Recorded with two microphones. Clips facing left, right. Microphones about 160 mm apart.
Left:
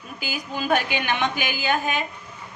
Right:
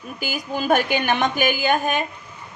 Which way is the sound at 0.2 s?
45° right (ahead or behind).